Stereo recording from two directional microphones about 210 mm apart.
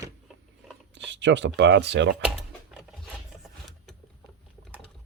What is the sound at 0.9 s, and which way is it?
Speech, 55° right (ahead or behind).